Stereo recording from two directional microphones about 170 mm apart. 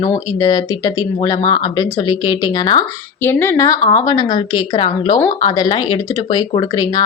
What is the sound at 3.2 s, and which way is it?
A woman's voice, 15° left (ahead or behind).